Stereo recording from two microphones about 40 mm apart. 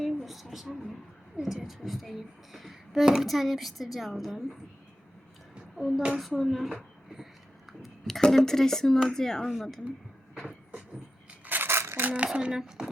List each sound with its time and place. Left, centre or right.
0.0 s guitar: centre
1.6 s speech: centre
5.7 s speech: centre
7.7 s a sound: centre
8.3 s speech: centre
9.5 s speech: centre
11.4 s coin: right
11.7 s crumpling: right
12.1 s speech: right